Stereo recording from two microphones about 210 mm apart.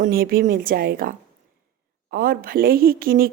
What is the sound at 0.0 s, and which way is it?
A woman's voice, 45° right (ahead or behind).